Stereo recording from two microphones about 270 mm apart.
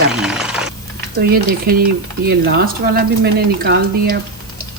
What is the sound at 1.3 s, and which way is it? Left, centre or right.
Speech, right.